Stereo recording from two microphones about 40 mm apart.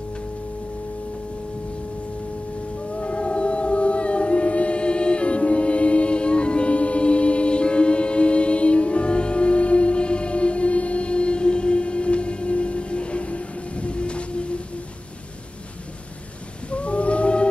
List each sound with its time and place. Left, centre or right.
3.0 s music: left
16.7 s whale vocalization: left